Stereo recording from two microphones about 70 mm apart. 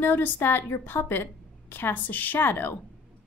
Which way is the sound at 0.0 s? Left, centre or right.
Left.